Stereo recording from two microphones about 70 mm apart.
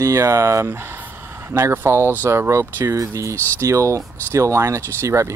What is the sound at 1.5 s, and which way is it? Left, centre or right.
Speech, right.